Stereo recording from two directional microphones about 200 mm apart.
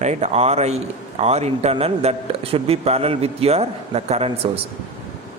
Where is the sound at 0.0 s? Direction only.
35° right (ahead or behind).